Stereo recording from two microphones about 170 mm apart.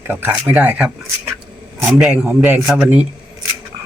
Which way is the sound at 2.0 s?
5° right (ahead or behind).